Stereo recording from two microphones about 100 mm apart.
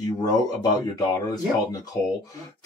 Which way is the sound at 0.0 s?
45° left (ahead or behind).